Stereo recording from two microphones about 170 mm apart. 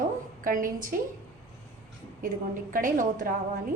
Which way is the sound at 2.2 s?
55° right (ahead or behind).